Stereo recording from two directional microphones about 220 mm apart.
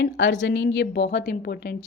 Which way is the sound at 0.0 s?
55° left (ahead or behind).